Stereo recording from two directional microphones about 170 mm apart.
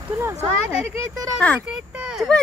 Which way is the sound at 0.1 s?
15° right (ahead or behind).